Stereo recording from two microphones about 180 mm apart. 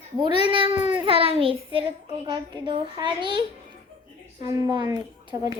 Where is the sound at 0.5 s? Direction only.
30° right (ahead or behind).